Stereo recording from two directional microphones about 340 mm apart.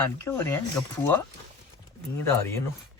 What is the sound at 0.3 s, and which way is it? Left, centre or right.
Speech, centre.